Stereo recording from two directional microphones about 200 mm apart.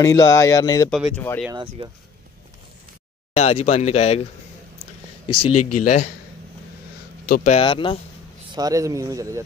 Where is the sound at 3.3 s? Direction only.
30° left (ahead or behind).